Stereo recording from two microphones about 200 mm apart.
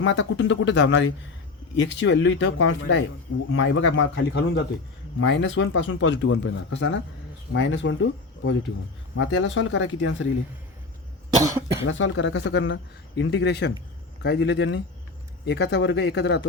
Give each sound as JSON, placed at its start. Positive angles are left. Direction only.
{"t": 0.0, "sound": "a man's voice", "side_deg": 70}
{"t": 9.1, "sound": "a man's voice", "side_deg": 75}
{"t": 11.4, "sound": "speech", "side_deg": -15}
{"t": 11.9, "sound": "a man's voice", "side_deg": 75}